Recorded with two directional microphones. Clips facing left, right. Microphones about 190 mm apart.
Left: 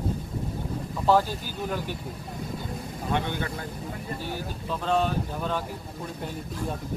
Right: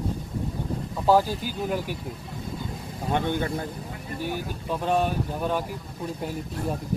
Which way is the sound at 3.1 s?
45° right (ahead or behind).